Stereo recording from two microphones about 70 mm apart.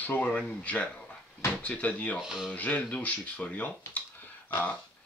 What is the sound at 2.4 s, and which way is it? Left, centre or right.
Speech, left.